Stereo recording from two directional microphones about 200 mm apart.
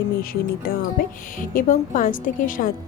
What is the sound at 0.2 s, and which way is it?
A woman's voice, 45° left (ahead or behind).